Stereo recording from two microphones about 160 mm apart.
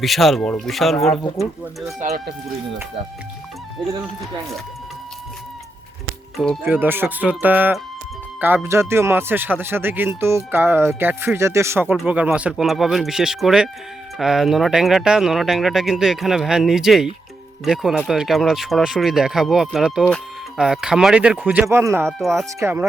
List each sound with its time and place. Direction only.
0.0 s speech: centre (ahead or behind)
2.0 s speech: 50° right (ahead or behind)
6.3 s speech: 5° left (ahead or behind)
6.7 s speech: 10° right (ahead or behind)